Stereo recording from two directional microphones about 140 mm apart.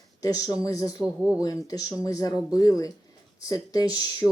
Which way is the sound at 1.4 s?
25° left (ahead or behind).